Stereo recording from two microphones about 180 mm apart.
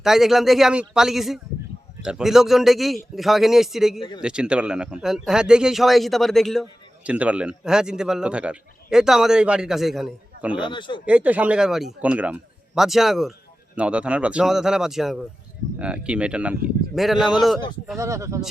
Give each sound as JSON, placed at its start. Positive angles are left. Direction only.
{"t": 0.0, "sound": "a man's voice", "side_deg": 0}
{"t": 10.6, "sound": "speech", "side_deg": 25}
{"t": 11.0, "sound": "a man's voice", "side_deg": -5}
{"t": 17.9, "sound": "speech", "side_deg": -15}